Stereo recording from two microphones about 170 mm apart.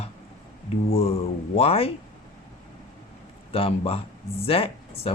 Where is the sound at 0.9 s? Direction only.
35° left (ahead or behind).